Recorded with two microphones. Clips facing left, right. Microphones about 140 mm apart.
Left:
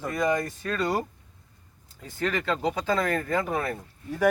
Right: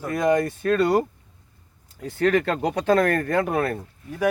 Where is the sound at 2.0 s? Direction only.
65° right (ahead or behind).